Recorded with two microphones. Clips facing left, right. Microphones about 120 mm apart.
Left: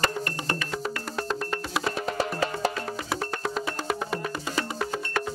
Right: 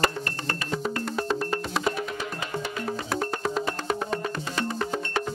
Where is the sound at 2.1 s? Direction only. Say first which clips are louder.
Left 4 dB; 35° left (ahead or behind).